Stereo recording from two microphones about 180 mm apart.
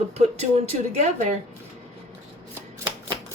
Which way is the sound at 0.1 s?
35° right (ahead or behind).